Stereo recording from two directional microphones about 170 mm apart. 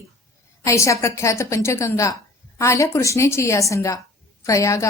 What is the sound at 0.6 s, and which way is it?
A woman's voice, 20° left (ahead or behind).